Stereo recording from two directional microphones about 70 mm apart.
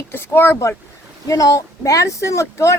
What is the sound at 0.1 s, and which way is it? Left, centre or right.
Speech, left.